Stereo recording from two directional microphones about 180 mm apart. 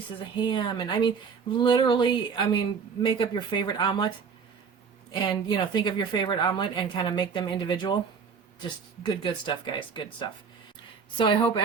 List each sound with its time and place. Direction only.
0.4 s speech: 25° left (ahead or behind)
5.1 s speech: 25° left (ahead or behind)
11.3 s speech: 30° left (ahead or behind)